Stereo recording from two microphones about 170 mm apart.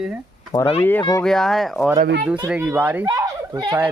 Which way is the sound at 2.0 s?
65° right (ahead or behind).